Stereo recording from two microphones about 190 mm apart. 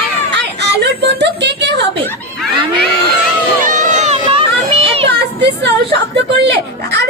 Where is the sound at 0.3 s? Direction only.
65° right (ahead or behind).